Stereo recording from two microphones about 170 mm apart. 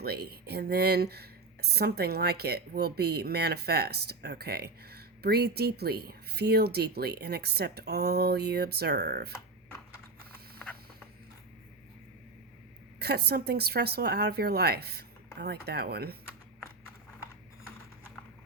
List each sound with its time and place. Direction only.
0.0 s speech: 70° right (ahead or behind)
13.0 s speech: 70° right (ahead or behind)